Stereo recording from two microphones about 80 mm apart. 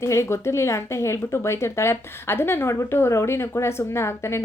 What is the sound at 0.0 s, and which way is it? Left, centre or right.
Speech, left.